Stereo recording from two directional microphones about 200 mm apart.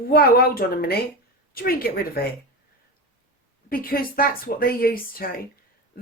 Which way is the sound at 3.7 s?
45° left (ahead or behind).